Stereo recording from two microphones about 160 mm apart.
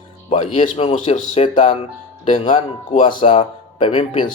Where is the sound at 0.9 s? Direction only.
45° left (ahead or behind).